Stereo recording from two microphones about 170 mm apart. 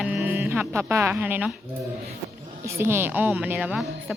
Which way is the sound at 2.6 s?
15° right (ahead or behind).